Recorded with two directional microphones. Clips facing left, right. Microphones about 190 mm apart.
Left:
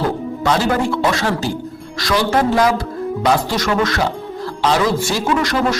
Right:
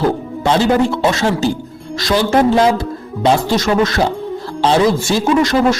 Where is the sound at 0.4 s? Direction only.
25° right (ahead or behind).